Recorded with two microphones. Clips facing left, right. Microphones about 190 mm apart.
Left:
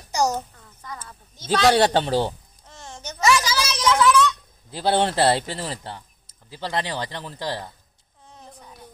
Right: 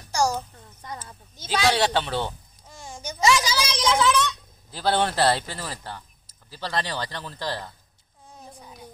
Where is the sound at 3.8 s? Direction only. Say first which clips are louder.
Left 3 dB; 25° right (ahead or behind).